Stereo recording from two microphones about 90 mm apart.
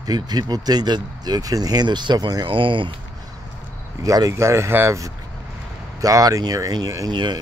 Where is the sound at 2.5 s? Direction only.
70° right (ahead or behind).